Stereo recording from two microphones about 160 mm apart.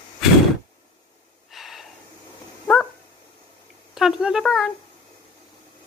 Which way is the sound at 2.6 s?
5° left (ahead or behind).